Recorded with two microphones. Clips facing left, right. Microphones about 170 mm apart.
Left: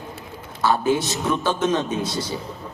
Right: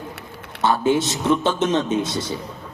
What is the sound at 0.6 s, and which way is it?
A man's voice, 25° right (ahead or behind).